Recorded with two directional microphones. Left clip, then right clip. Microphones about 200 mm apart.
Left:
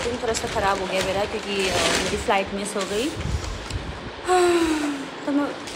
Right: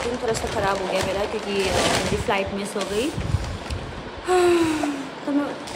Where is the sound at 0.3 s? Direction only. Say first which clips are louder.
Left 1 dB; 10° right (ahead or behind).